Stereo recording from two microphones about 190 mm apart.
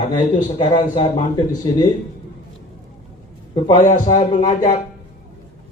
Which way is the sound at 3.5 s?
25° left (ahead or behind).